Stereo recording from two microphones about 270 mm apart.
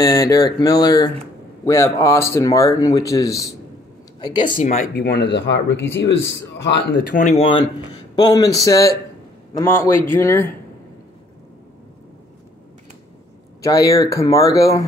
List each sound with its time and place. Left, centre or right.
0.0 s speech: centre
4.6 s speech: left
7.2 s speech: left; by 10.5 s centre
13.6 s speech: centre